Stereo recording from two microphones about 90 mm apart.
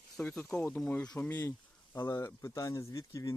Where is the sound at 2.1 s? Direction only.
40° left (ahead or behind).